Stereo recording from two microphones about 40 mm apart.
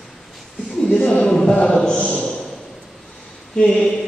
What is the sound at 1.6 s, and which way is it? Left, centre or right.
Speech, left.